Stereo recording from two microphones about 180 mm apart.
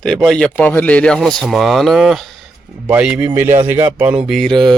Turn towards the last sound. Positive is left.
turn(degrees=0)  # may be behind; listen again after turning